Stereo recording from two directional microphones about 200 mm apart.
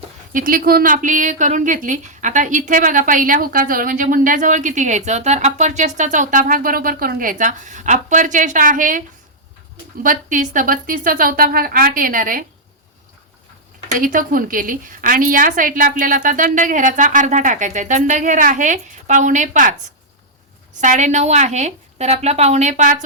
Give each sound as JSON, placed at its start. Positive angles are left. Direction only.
{"t": 0.3, "sound": "a woman's voice", "side_deg": -45}
{"t": 14.0, "sound": "a woman's voice", "side_deg": -45}
{"t": 20.8, "sound": "a woman's voice", "side_deg": -35}